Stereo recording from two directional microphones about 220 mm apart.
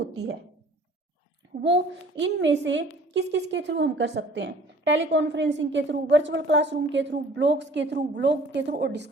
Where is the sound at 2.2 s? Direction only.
55° right (ahead or behind).